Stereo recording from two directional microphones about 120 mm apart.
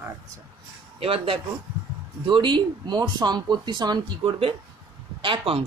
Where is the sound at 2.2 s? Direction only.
40° right (ahead or behind).